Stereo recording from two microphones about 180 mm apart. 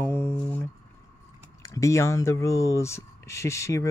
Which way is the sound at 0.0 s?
10° left (ahead or behind).